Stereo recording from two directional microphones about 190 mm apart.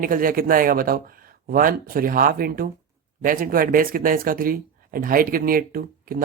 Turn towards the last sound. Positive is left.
turn(degrees=-50)  # may be behind; listen again after turning